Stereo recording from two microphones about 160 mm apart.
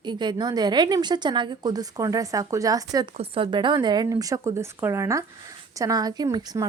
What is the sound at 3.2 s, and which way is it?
A woman's voice, 35° right (ahead or behind).